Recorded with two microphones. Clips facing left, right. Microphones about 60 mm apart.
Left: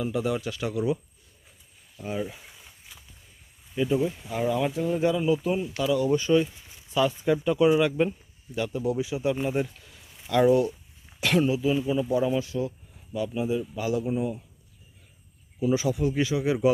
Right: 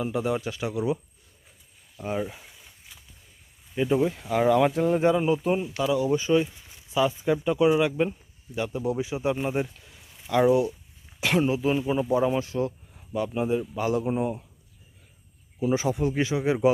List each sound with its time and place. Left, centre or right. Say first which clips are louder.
0.0 s speech: right 1 dB; right
2.0 s speech: right 2 dB; right
3.8 s a man's voice: right 2 dB; right
4.1 s speech: right 6 dB; right
4.7 s a man's voice: right 4 dB; right
5.0 s speech: left 1 dB; right
5.6 s speech: even; centre
8.5 s speech: even; right
11.5 s speech: even; right
13.1 s a man's voice: right 2 dB; right
15.6 s speech: even; right